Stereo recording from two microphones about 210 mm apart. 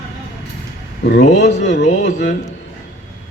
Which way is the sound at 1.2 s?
35° left (ahead or behind).